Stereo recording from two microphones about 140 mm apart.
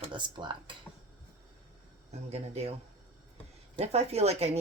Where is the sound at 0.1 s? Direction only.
35° right (ahead or behind).